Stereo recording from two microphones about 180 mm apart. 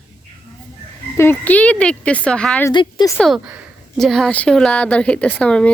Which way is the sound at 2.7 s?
25° left (ahead or behind).